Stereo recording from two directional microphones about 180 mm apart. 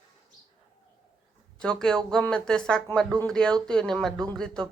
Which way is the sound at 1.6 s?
5° left (ahead or behind).